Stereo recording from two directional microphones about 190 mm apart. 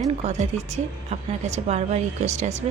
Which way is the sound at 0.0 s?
35° right (ahead or behind).